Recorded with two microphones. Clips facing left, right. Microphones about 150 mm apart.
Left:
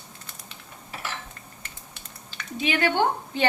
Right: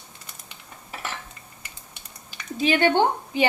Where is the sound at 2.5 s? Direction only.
35° right (ahead or behind).